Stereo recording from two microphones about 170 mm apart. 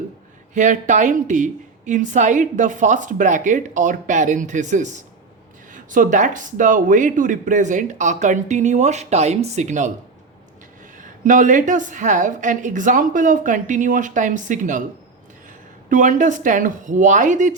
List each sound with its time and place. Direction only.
0.5 s speech: 45° right (ahead or behind)
10.9 s speech: 50° right (ahead or behind)
15.9 s speech: 50° right (ahead or behind)